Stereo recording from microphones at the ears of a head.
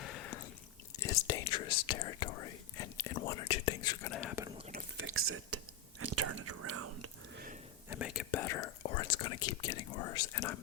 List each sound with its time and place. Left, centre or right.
0.0 s a sound: left
0.9 s speech: left
5.0 s speech: right
6.0 s whispering: right
7.9 s speech: left